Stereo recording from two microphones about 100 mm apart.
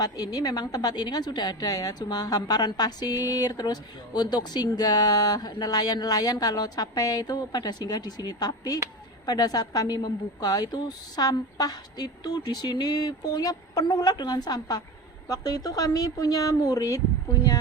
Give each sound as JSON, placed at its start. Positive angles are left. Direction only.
{"t": 0.0, "sound": "a woman's voice", "side_deg": 40}